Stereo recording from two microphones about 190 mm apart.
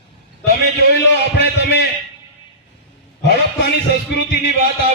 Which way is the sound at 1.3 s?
60° left (ahead or behind).